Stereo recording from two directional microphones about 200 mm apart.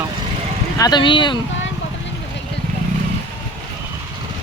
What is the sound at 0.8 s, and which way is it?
Speech, 20° left (ahead or behind).